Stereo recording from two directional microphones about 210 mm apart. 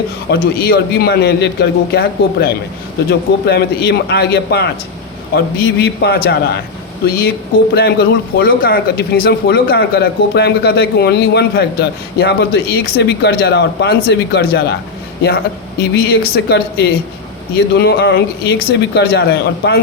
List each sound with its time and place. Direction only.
0.3 s speech: 50° left (ahead or behind)
15.9 s speech: 50° left (ahead or behind)